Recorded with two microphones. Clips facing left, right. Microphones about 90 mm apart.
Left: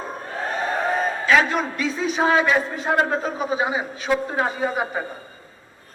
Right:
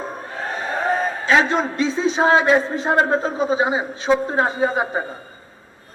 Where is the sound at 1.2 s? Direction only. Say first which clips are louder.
Right 1 dB; 25° right (ahead or behind).